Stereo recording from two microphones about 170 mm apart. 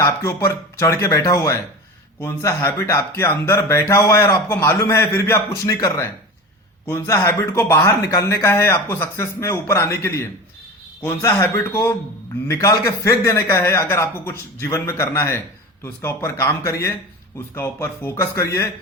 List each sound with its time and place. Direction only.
0.0 s speech: 20° left (ahead or behind)